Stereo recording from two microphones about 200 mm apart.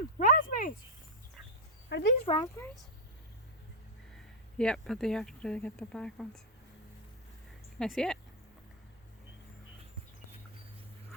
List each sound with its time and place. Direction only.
0.2 s a sound: 40° left (ahead or behind)
1.9 s speech: 60° left (ahead or behind)
2.3 s speech: 25° left (ahead or behind)
4.5 s speech: 5° left (ahead or behind)
7.8 s speech: centre (ahead or behind)